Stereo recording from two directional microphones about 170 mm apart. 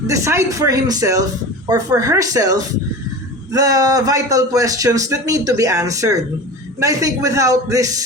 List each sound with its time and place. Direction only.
0.1 s a man's voice: 15° right (ahead or behind)